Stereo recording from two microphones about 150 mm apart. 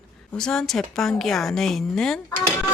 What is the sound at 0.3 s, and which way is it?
Speech, 5° left (ahead or behind).